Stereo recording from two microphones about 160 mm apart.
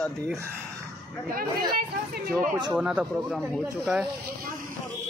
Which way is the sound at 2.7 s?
5° right (ahead or behind).